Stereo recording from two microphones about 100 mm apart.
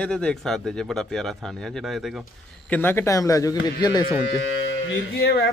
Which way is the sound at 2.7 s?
20° left (ahead or behind).